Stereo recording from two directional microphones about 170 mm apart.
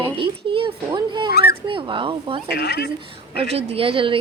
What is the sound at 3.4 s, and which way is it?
Speech, 35° right (ahead or behind).